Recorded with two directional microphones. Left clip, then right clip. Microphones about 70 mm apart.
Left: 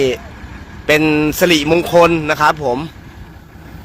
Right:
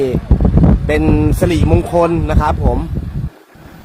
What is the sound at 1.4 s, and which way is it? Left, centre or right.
Speech, centre.